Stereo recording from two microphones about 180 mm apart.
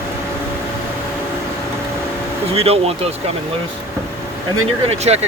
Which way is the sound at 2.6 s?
35° right (ahead or behind).